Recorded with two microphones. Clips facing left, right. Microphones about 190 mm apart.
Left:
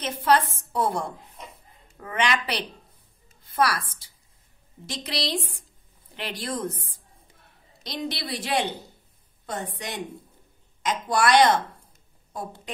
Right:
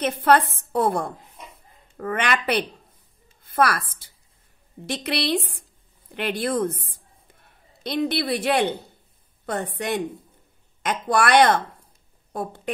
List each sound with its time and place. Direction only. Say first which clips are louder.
0.0 s a woman's voice: right 3 dB; 55° right (ahead or behind)
4.8 s speech: right 5 dB; 60° right (ahead or behind)
10.8 s a woman's voice: right 2 dB; 60° right (ahead or behind)